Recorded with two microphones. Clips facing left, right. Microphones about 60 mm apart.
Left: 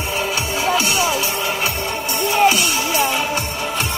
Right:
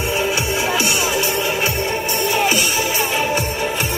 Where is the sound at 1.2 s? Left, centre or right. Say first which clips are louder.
Right 2 dB; centre.